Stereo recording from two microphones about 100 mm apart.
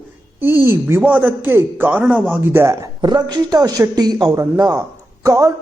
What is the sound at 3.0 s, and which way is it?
Speech, 45° right (ahead or behind).